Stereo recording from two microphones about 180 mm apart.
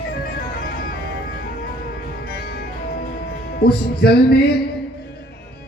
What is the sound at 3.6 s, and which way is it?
Music, 60° left (ahead or behind).